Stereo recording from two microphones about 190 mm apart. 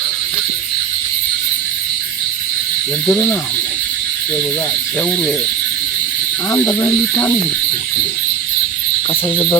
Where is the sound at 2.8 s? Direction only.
5° left (ahead or behind).